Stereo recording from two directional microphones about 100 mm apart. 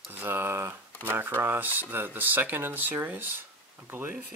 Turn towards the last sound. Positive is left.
turn(degrees=-20)  # may be behind; listen again after turning